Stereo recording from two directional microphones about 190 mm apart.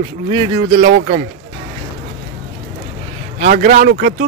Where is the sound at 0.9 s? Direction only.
55° right (ahead or behind).